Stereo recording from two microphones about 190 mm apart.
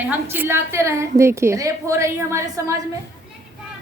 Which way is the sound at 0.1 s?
10° right (ahead or behind).